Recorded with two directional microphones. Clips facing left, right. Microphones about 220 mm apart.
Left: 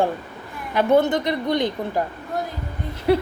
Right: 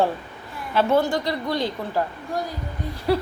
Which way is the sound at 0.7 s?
20° left (ahead or behind).